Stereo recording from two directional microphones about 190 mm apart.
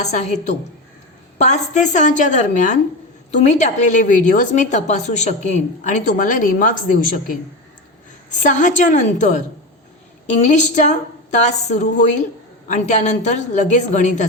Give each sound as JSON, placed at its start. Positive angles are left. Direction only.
{"t": 0.0, "sound": "a woman's voice", "side_deg": 35}
{"t": 10.4, "sound": "a woman's voice", "side_deg": 40}